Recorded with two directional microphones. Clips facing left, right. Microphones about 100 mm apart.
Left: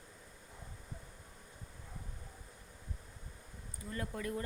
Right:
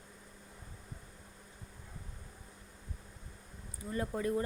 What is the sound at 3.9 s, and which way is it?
Speech, 25° right (ahead or behind).